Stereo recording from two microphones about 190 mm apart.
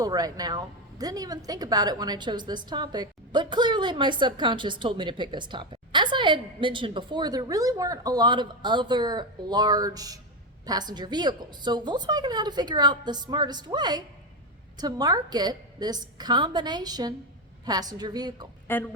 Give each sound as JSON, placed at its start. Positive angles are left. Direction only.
{"t": 0.0, "sound": "a woman's voice", "side_deg": -20}
{"t": 18.7, "sound": "speech", "side_deg": 10}